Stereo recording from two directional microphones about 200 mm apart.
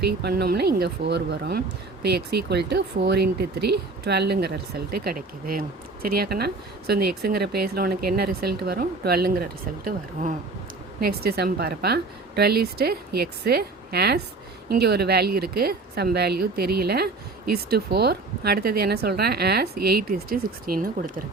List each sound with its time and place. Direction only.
0.2 s speech: 55° right (ahead or behind)